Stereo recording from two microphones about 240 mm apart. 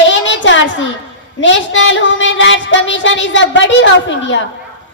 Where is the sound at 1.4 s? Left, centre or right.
Left.